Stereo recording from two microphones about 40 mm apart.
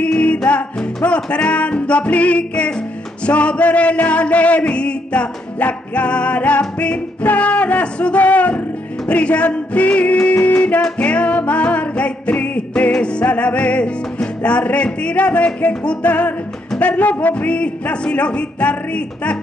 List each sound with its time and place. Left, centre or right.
0.0 s music: left
10.3 s music: left
11.0 s music: left
13.2 s music: left